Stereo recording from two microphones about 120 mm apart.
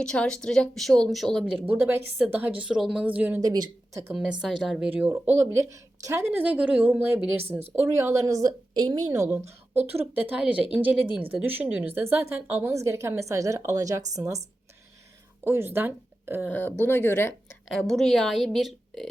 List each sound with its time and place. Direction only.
0.0 s a woman's voice: 5° left (ahead or behind)
1.5 s a woman's voice: 15° right (ahead or behind)
3.4 s speech: 30° right (ahead or behind)
4.1 s a woman's voice: 5° right (ahead or behind)
7.9 s a woman's voice: 25° right (ahead or behind)
10.2 s a woman's voice: 15° right (ahead or behind)
15.4 s speech: 20° right (ahead or behind)
16.5 s speech: 15° left (ahead or behind)
17.7 s a woman's voice: centre (ahead or behind)